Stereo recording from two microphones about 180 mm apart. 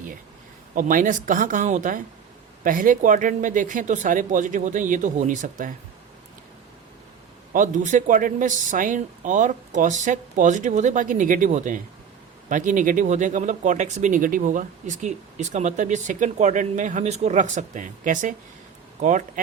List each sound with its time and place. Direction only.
0.8 s speech: 45° right (ahead or behind)
7.5 s speech: 45° right (ahead or behind)